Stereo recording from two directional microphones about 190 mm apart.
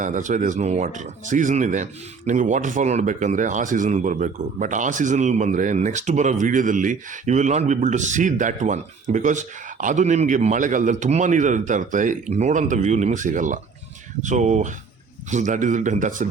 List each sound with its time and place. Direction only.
0.0 s speech: 40° right (ahead or behind)